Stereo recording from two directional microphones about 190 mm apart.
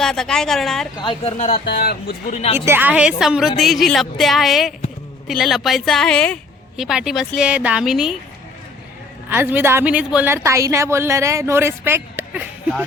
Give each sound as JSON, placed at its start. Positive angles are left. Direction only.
{"t": 0.0, "sound": "a woman's voice", "side_deg": 5}
{"t": 0.9, "sound": "speech", "side_deg": 25}
{"t": 1.4, "sound": "speech", "side_deg": 40}
{"t": 1.6, "sound": "speech", "side_deg": 55}
{"t": 2.3, "sound": "speech", "side_deg": 35}
{"t": 2.6, "sound": "a woman's voice", "side_deg": -10}
{"t": 9.3, "sound": "a woman's voice", "side_deg": -10}